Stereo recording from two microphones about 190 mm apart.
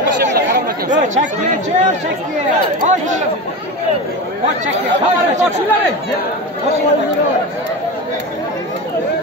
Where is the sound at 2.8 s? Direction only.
40° right (ahead or behind).